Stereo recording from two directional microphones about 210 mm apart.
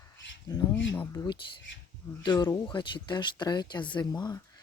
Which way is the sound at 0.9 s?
10° left (ahead or behind).